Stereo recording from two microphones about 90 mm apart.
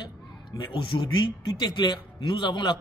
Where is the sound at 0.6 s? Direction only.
65° left (ahead or behind).